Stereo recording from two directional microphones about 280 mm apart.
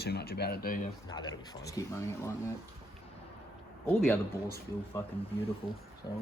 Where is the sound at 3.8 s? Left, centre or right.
Centre.